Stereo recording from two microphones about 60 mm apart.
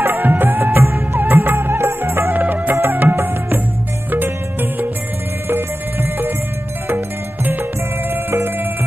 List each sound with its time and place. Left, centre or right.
0.0 s music: right
0.8 s music of bollywood: right
2.3 s music of bollywood: right
4.1 s music: right
8.1 s music: right